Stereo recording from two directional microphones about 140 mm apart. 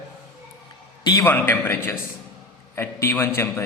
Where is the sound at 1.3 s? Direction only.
15° left (ahead or behind).